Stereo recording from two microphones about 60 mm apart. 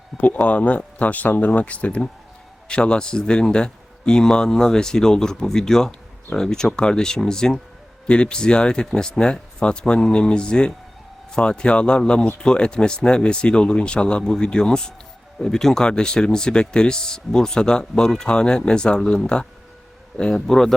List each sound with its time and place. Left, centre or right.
0.2 s speech: left; by 20.7 s centre